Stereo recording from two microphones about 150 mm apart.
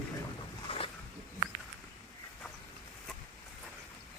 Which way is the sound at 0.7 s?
40° left (ahead or behind).